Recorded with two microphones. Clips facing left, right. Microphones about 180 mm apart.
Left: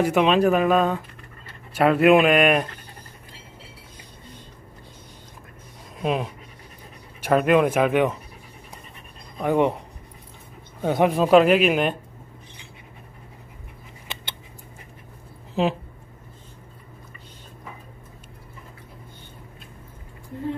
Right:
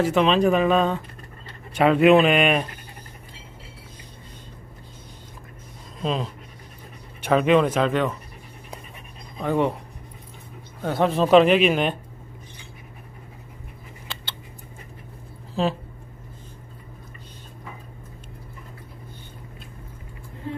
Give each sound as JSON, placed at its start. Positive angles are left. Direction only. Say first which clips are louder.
{"t": 0.0, "sound": "speech", "louder": "left 1 dB", "side_deg": 10}
{"t": 6.0, "sound": "speech", "louder": "left 2 dB", "side_deg": 10}
{"t": 9.4, "sound": "speech", "louder": "left 2 dB", "side_deg": 15}
{"t": 10.8, "sound": "speech", "louder": "left 2 dB", "side_deg": 15}
{"t": 14.1, "sound": "scissors", "louder": "left 1 dB", "side_deg": 20}
{"t": 15.6, "sound": "speech", "louder": "left 1 dB", "side_deg": 15}